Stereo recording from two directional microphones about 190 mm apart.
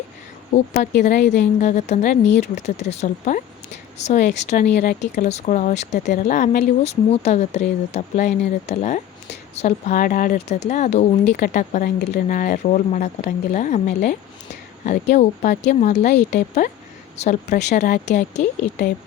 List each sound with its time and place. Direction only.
0.5 s speech: 40° left (ahead or behind)
1.1 s a woman's voice: 65° left (ahead or behind)
1.4 s speech: 40° left (ahead or behind)
17.2 s speech: 40° left (ahead or behind)